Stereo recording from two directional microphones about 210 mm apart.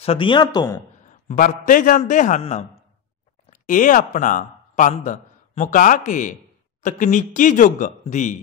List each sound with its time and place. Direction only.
0.0 s speech: 25° left (ahead or behind)
1.3 s a man's voice: 40° left (ahead or behind)